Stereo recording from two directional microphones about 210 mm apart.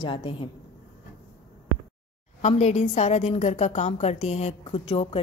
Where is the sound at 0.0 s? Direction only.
25° left (ahead or behind).